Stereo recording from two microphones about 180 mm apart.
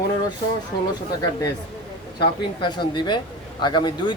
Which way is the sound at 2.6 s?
25° left (ahead or behind).